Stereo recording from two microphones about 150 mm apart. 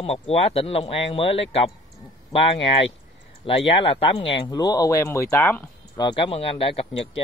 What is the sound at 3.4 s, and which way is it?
Speech, 40° left (ahead or behind).